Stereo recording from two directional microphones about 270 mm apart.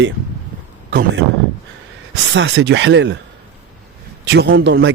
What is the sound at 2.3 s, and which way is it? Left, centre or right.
Speech, right.